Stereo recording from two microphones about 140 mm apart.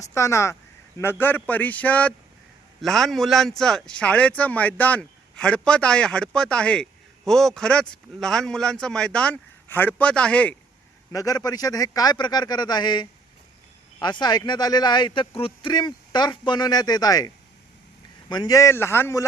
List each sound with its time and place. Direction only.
0.0 s a man's voice: 20° left (ahead or behind)
11.1 s speech: 25° left (ahead or behind)